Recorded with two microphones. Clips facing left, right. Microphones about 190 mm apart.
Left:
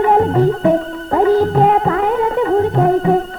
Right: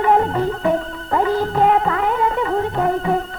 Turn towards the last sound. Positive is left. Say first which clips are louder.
# left 6 dB
turn(degrees=35)  # may be behind; listen again after turning